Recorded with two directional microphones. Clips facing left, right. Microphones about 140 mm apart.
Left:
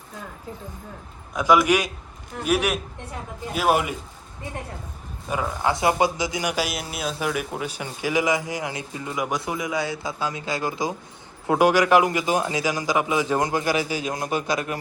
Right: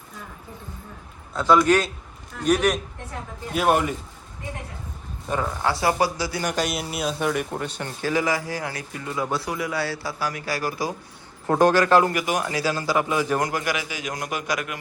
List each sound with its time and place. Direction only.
1.3 s a man's voice: 10° left (ahead or behind)
5.3 s a man's voice: 10° left (ahead or behind)
5.7 s a man's voice: 20° left (ahead or behind)
12.2 s a man's voice: 25° left (ahead or behind)